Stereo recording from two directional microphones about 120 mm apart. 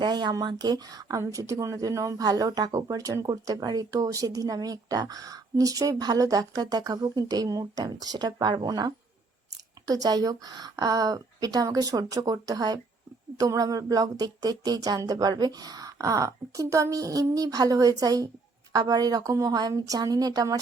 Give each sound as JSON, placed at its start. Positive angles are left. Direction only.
{"t": 0.0, "sound": "speech", "side_deg": -35}